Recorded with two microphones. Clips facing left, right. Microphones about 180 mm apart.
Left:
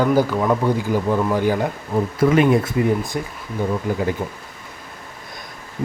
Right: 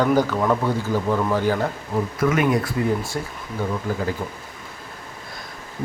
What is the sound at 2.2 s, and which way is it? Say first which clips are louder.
A man's voice: left 5 dB; 25° left (ahead or behind).